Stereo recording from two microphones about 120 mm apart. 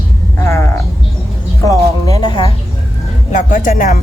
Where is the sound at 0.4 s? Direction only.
20° left (ahead or behind).